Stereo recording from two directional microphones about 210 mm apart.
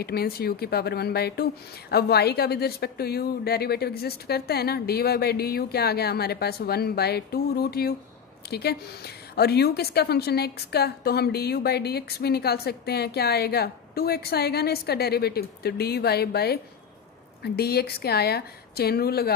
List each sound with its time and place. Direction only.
0.0 s a woman's voice: 50° left (ahead or behind)